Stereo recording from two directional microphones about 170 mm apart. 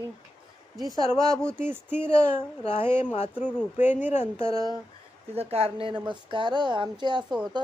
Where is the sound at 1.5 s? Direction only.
10° right (ahead or behind).